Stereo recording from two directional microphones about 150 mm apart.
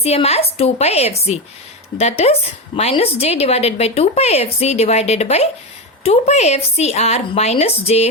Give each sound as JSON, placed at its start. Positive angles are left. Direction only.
{"t": 0.0, "sound": "a woman's voice", "side_deg": 45}